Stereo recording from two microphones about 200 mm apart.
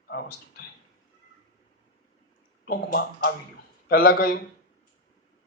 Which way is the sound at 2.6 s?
50° left (ahead or behind).